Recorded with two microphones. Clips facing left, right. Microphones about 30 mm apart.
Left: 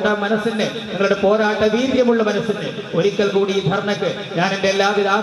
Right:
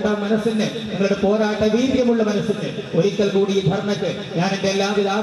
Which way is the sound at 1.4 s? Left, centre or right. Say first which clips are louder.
Left 1 dB; centre.